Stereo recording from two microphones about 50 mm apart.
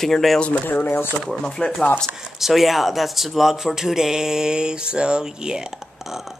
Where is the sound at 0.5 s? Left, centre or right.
Left.